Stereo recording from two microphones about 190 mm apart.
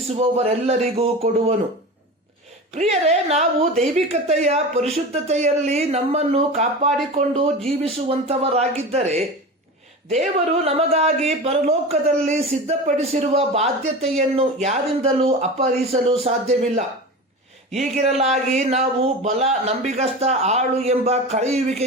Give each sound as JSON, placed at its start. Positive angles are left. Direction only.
{"t": 0.1, "sound": "speech", "side_deg": -30}
{"t": 2.7, "sound": "speech", "side_deg": -35}